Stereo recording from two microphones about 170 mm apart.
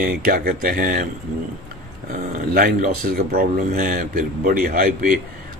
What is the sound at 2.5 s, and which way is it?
Speech, 60° right (ahead or behind).